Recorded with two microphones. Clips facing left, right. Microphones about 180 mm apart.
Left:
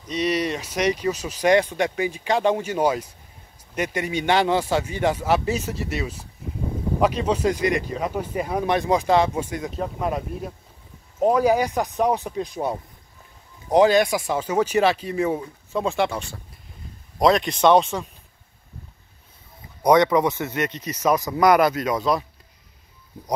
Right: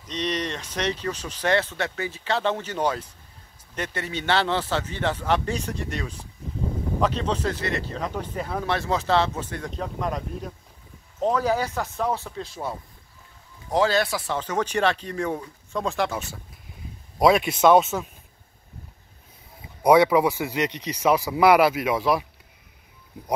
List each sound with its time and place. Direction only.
0.1 s speech: 10° left (ahead or behind)
19.8 s speech: 5° right (ahead or behind)